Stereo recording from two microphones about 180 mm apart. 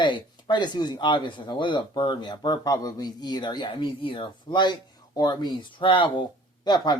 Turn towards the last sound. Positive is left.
turn(degrees=25)  # may be behind; listen again after turning